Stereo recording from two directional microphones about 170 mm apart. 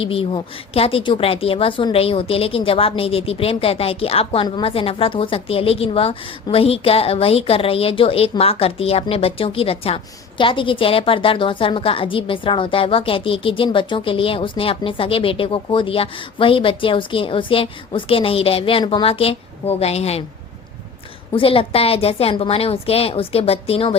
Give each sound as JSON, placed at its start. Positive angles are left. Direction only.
{"t": 0.0, "sound": "a woman's voice", "side_deg": 35}
{"t": 21.3, "sound": "a woman's voice", "side_deg": 30}